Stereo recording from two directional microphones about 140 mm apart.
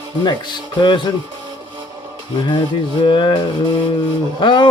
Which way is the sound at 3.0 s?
35° left (ahead or behind).